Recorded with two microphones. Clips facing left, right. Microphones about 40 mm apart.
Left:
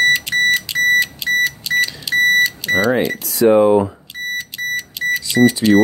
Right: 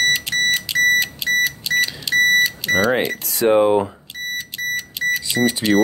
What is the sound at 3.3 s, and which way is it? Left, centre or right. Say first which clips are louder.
Speech: left 3 dB; right.